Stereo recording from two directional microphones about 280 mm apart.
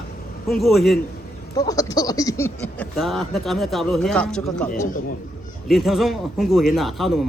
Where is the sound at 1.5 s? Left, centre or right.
Centre.